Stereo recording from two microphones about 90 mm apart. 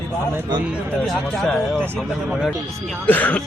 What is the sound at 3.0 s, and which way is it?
Speech, 20° left (ahead or behind).